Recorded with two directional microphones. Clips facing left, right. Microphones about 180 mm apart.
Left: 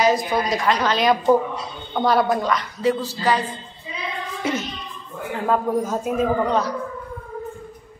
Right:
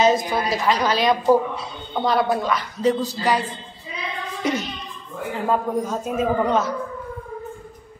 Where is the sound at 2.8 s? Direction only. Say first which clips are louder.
Right 2 dB; 15° right (ahead or behind).